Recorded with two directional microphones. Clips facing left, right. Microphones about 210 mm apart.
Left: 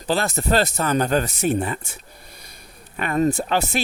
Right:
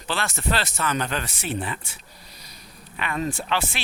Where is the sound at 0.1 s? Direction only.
40° left (ahead or behind).